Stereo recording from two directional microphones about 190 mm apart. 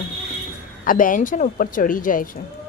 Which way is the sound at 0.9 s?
45° left (ahead or behind).